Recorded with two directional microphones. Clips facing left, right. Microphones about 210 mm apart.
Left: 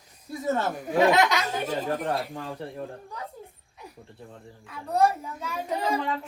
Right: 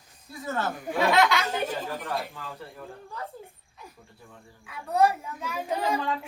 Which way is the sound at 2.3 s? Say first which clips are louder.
Left 6 dB; 35° left (ahead or behind).